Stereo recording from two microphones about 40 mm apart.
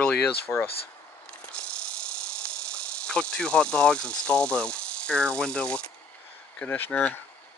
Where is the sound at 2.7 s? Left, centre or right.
Left.